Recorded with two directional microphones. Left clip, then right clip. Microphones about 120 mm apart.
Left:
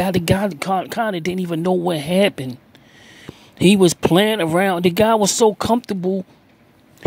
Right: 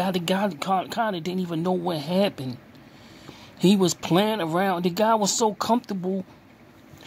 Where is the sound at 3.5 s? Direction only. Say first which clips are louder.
Left 7 dB; 45° left (ahead or behind).